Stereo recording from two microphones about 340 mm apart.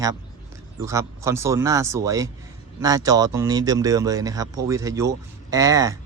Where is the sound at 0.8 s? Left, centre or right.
Centre.